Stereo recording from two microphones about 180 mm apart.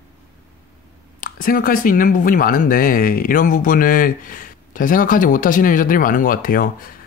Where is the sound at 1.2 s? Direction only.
50° left (ahead or behind).